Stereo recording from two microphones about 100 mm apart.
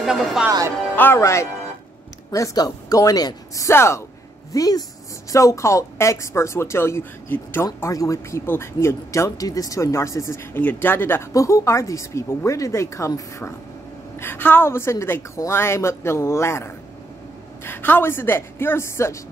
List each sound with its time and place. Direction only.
0.0 s speech: 5° right (ahead or behind)
0.9 s speech: 25° left (ahead or behind)
4.5 s speech: 35° left (ahead or behind); by 7.6 s 20° left (ahead or behind)
7.6 s speech: 35° left (ahead or behind)
10.6 s speech: 20° left (ahead or behind)